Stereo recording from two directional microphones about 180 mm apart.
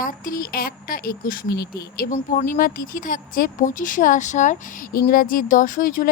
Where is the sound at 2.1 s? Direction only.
45° left (ahead or behind).